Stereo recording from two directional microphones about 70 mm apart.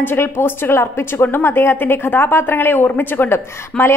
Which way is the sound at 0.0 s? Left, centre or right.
Left.